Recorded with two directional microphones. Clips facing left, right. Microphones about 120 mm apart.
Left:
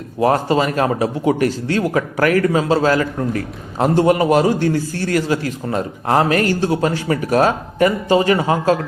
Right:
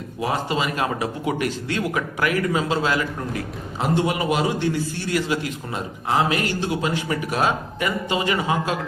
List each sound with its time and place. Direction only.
0.2 s a man's voice: 45° left (ahead or behind)